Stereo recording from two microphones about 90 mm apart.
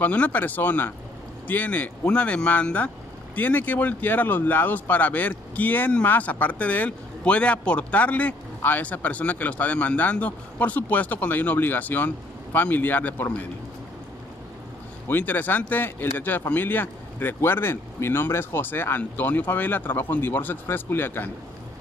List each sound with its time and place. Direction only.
0.0 s speech: 15° left (ahead or behind)
15.0 s speech: 20° left (ahead or behind)